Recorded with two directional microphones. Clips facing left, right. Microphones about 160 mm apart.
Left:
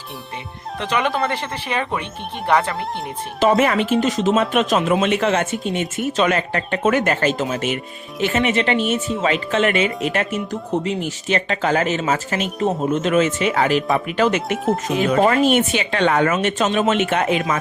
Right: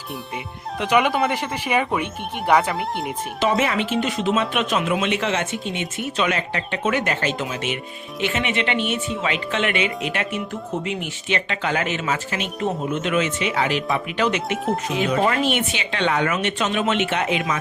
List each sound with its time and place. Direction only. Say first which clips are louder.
0.8 s speech: right 2 dB; 10° right (ahead or behind)
3.4 s speech: left 5 dB; 50° left (ahead or behind)
14.5 s speech: left 3 dB; centre (ahead or behind)
15.0 s speech: left 5 dB; 50° left (ahead or behind)
16.6 s speech: left 4 dB; 25° left (ahead or behind)
16.9 s speech: left 3 dB; 45° left (ahead or behind)